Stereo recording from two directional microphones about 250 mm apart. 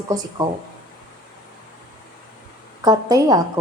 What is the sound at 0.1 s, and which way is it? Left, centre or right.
Speech, centre.